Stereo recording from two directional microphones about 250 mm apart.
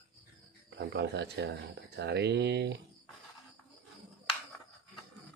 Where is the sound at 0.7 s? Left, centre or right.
Right.